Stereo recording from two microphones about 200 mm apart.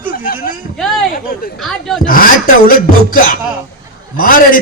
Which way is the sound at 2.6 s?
45° left (ahead or behind).